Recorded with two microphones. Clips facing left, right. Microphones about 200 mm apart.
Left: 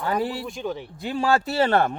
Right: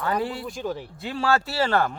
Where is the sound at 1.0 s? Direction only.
15° left (ahead or behind).